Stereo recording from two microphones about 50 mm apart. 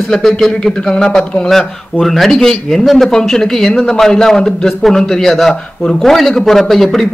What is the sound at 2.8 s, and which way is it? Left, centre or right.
Speech, centre.